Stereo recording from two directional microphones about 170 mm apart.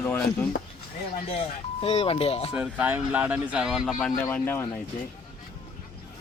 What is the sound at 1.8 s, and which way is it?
Speech, 35° left (ahead or behind).